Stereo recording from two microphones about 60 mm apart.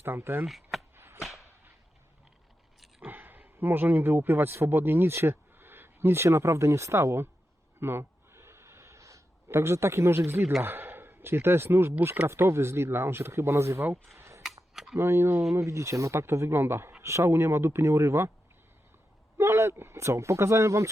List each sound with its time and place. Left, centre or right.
0.0 s speech: right
0.4 s speech: centre
0.9 s a sound: right
3.1 s speech: right
7.8 s a sound: right
10.6 s speech: right
14.2 s camera: right
14.4 s cap gun: centre
14.9 s speech: right
17.0 s speech: right
19.4 s speech: right